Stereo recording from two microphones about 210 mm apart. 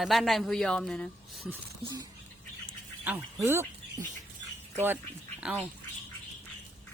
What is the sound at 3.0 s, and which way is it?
Speech, 10° right (ahead or behind).